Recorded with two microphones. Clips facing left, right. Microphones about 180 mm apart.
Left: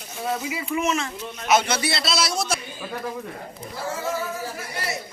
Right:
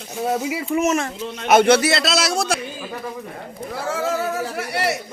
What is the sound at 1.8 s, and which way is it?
Speech, 90° right.